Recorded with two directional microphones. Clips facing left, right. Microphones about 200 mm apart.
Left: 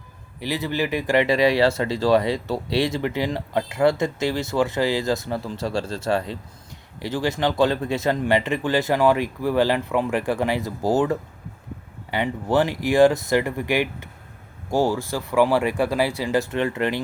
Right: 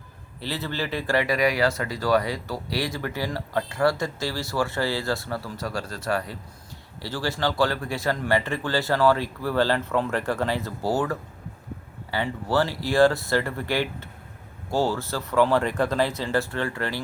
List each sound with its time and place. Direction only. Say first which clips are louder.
0.3 s speech: left 5 dB; 15° left (ahead or behind)